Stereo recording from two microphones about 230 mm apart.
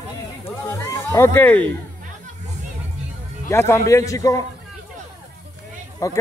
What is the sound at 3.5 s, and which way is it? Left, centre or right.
Speech, centre.